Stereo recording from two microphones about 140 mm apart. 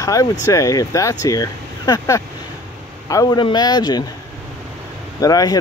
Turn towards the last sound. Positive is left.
turn(degrees=25)  # may be behind; listen again after turning